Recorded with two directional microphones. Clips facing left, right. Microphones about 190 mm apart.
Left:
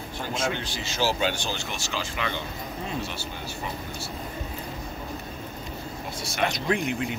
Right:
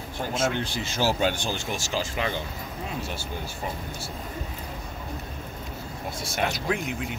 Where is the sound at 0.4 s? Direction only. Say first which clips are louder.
Right 3 dB; 50° right (ahead or behind).